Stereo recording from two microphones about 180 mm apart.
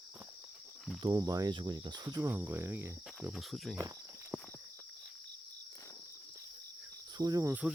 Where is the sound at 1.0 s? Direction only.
20° right (ahead or behind).